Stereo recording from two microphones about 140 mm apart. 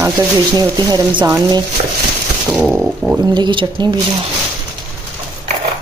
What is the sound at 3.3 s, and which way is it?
Speech, 35° right (ahead or behind).